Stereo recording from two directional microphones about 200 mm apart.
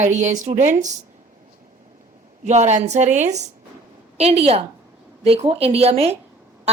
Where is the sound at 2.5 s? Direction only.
35° right (ahead or behind).